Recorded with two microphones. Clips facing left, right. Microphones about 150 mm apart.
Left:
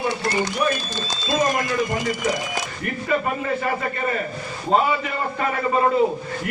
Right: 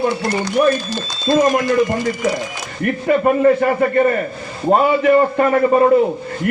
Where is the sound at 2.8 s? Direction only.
55° right (ahead or behind).